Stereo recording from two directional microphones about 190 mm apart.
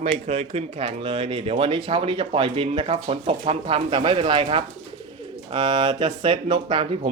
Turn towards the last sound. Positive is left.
turn(degrees=-30)  # may be behind; listen again after turning